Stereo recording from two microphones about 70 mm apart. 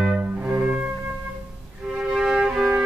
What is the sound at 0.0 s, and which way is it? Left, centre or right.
Music, centre.